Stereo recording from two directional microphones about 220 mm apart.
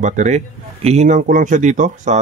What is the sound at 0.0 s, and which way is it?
Speech, 35° right (ahead or behind).